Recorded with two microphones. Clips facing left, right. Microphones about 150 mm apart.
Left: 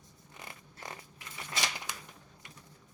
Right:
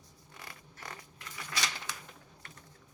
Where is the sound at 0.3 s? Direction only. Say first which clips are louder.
Left 1 dB; 20° left (ahead or behind).